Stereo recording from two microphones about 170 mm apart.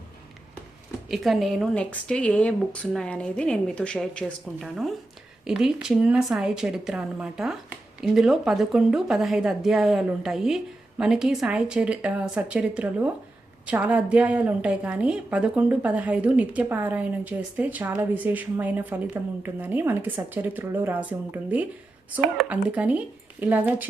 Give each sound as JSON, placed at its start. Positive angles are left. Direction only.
{"t": 1.0, "sound": "a woman's voice", "side_deg": 0}